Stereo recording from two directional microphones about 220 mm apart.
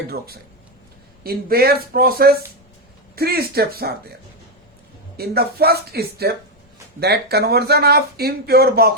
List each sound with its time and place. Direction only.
1.2 s speech: 45° right (ahead or behind)
5.1 s speech: 45° right (ahead or behind)